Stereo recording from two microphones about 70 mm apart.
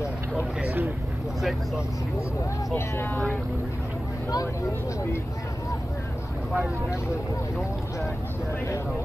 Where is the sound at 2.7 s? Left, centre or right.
Left.